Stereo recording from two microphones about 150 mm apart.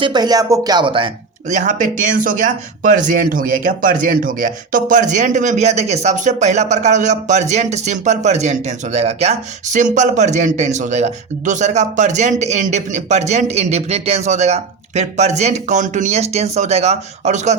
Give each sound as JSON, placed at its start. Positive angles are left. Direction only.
{"t": 0.0, "sound": "speech", "side_deg": -30}
{"t": 1.5, "sound": "speech", "side_deg": -55}